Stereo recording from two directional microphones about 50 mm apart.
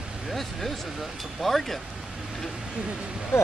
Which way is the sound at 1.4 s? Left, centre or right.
Centre.